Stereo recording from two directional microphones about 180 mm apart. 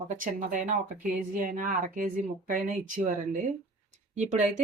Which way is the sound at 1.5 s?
50° right (ahead or behind).